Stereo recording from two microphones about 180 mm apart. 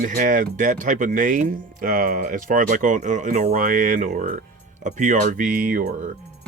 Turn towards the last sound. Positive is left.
turn(degrees=-45)  # may be behind; listen again after turning